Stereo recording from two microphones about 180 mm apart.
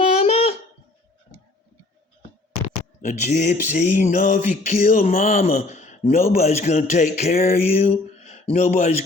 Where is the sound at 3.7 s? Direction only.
40° left (ahead or behind).